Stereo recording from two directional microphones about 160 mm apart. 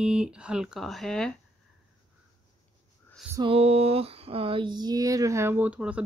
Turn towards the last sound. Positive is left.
turn(degrees=-10)  # may be behind; listen again after turning